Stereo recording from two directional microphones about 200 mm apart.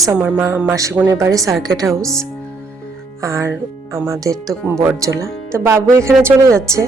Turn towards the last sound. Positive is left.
turn(degrees=-15)  # may be behind; listen again after turning